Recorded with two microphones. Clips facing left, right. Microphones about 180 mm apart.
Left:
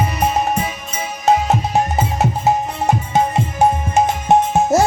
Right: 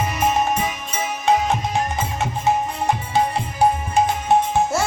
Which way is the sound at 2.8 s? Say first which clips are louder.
Left 4 dB; 45° left (ahead or behind).